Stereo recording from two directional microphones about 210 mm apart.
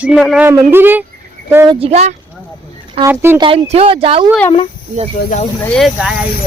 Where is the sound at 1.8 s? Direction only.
30° right (ahead or behind).